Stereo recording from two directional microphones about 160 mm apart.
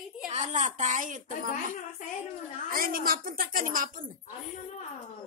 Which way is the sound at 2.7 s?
65° right (ahead or behind).